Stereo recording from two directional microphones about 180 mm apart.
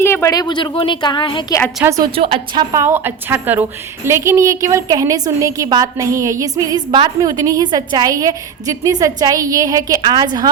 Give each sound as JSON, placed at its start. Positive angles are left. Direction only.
{"t": 0.0, "sound": "a woman's voice", "side_deg": 15}
{"t": 1.8, "sound": "a woman's voice", "side_deg": -15}
{"t": 2.1, "sound": "a woman's voice", "side_deg": -30}
{"t": 2.7, "sound": "a woman's voice", "side_deg": -15}